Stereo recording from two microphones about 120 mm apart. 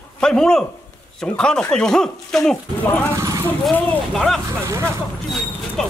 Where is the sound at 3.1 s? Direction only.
25° right (ahead or behind).